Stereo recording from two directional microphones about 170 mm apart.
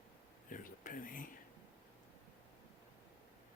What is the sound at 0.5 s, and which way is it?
Speech, 50° left (ahead or behind).